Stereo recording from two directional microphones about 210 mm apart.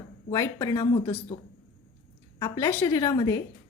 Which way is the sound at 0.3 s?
15° left (ahead or behind).